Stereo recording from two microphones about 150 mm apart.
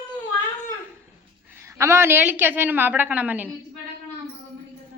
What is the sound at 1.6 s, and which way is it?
A woman's voice, 20° right (ahead or behind).